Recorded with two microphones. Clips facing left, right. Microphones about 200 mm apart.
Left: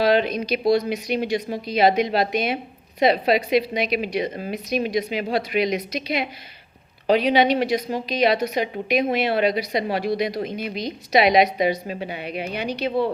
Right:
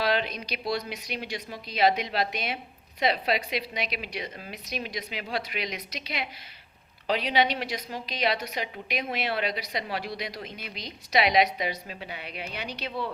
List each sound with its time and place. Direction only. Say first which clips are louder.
0.0 s a woman's voice: left 8 dB; 50° left (ahead or behind)